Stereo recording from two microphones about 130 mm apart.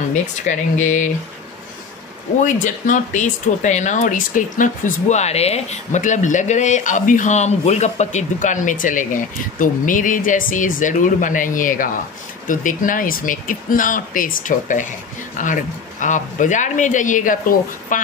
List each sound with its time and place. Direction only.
0.1 s speech: 70° left (ahead or behind)
2.4 s a man's voice: 75° left (ahead or behind)